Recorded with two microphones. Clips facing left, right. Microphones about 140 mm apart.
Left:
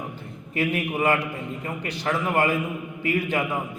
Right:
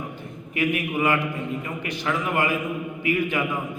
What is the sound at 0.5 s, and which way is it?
A man's voice, 35° left (ahead or behind).